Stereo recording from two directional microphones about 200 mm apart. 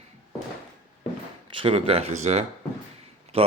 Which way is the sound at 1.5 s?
25° right (ahead or behind).